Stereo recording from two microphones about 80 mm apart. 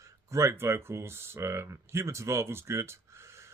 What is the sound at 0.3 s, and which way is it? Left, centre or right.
Speech, right.